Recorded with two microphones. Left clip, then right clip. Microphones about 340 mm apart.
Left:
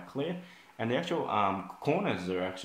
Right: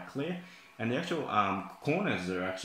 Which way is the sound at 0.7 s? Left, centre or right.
Left.